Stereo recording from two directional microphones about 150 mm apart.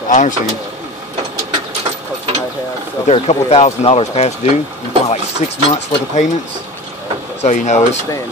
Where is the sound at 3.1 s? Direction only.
45° left (ahead or behind).